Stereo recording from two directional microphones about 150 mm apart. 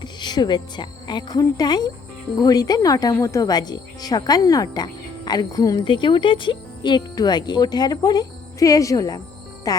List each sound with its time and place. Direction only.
0.0 s a woman's voice: 30° left (ahead or behind)